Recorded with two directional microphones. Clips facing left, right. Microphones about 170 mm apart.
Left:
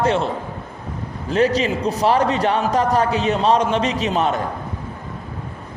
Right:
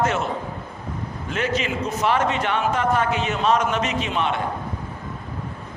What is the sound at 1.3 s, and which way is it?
A man's voice, 35° left (ahead or behind).